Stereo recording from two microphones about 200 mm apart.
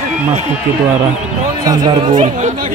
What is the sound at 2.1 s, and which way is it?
Speech, 40° right (ahead or behind).